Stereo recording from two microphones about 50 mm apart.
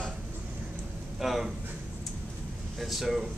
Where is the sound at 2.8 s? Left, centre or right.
Centre.